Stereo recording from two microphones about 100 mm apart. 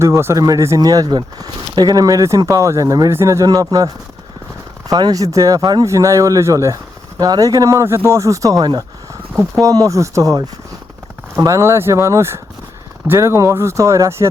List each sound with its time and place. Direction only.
0.0 s speech: 25° right (ahead or behind)
0.3 s speech: 35° right (ahead or behind)